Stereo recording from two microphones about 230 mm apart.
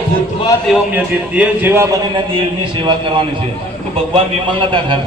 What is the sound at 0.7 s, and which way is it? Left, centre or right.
A man's voice, centre.